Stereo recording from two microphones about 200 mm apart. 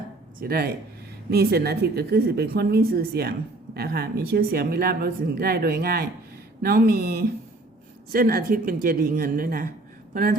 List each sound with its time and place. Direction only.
0.3 s speech: 50° right (ahead or behind)